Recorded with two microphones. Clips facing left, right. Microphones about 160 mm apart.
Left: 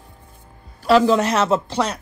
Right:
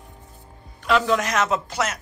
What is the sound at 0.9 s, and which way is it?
A man's voice, 35° left (ahead or behind).